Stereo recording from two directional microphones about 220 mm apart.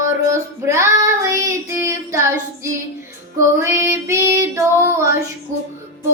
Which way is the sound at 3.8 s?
10° right (ahead or behind).